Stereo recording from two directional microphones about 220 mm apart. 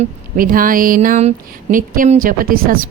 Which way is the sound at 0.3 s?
40° right (ahead or behind).